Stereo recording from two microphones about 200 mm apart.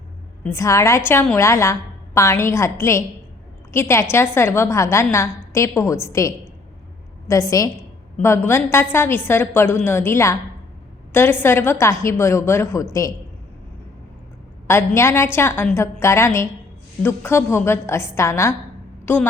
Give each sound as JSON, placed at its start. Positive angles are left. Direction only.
{"t": 0.4, "sound": "a woman's voice", "side_deg": 15}
{"t": 14.7, "sound": "a woman's voice", "side_deg": 10}